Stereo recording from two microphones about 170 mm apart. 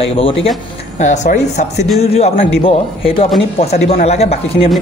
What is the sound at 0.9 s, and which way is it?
Speech, 45° left (ahead or behind).